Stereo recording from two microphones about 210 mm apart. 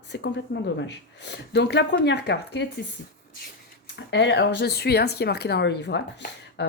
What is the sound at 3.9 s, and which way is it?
Speech, 55° left (ahead or behind).